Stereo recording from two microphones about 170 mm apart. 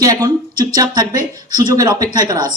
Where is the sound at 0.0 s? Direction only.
25° right (ahead or behind).